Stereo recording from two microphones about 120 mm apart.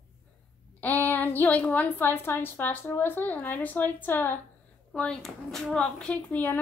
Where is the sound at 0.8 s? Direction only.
15° left (ahead or behind).